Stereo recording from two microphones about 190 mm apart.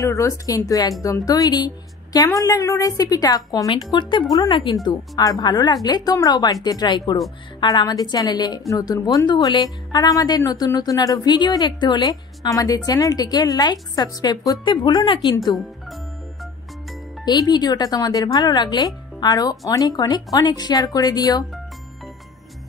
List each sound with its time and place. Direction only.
0.0 s a woman's voice: 15° left (ahead or behind)
15.4 s speech: centre (ahead or behind)
17.2 s speech: 20° left (ahead or behind)